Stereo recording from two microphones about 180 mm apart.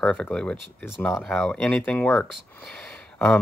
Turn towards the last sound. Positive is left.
turn(degrees=5)  # may be behind; listen again after turning